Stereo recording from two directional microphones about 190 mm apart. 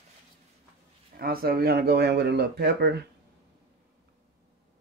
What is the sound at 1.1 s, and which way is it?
Speech, 50° right (ahead or behind).